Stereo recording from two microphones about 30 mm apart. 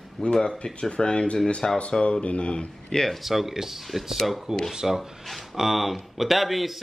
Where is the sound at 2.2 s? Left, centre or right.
Left.